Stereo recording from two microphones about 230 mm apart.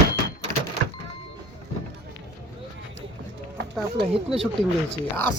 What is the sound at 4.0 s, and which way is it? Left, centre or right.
Speech, right.